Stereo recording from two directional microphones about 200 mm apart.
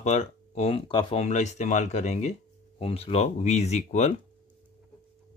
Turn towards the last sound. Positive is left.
turn(degrees=35)  # may be behind; listen again after turning